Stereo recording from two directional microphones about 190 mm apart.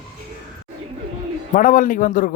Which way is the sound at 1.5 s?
45° left (ahead or behind).